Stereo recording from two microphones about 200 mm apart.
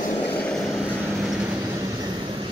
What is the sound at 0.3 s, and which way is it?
Vehicle, 5° left (ahead or behind).